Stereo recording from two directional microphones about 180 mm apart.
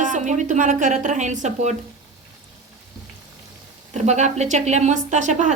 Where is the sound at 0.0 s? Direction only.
45° right (ahead or behind).